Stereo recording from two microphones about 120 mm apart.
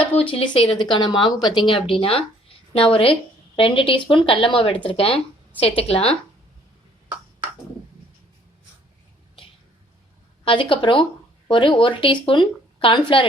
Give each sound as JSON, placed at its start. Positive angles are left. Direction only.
{"t": 0.0, "sound": "a woman's voice", "side_deg": 50}
{"t": 10.4, "sound": "a woman's voice", "side_deg": 45}